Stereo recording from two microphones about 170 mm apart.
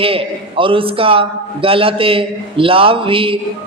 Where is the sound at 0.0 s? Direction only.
30° right (ahead or behind).